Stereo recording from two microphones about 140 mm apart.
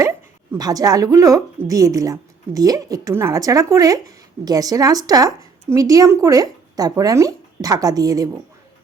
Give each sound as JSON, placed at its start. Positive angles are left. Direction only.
{"t": 0.5, "sound": "a woman's voice", "side_deg": -25}